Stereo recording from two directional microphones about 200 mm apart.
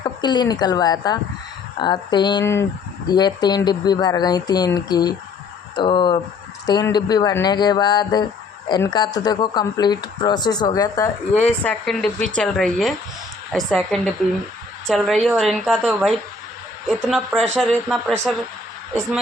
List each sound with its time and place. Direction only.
0.0 s a woman's voice: 20° left (ahead or behind); by 18.0 s centre (ahead or behind)